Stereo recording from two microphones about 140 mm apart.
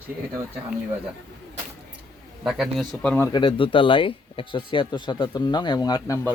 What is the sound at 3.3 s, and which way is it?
Speech, 35° left (ahead or behind).